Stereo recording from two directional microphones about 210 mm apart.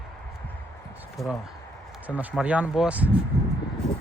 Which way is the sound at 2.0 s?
5° right (ahead or behind).